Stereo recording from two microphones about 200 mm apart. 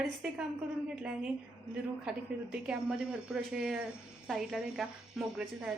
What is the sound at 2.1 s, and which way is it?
A woman's voice, 5° right (ahead or behind).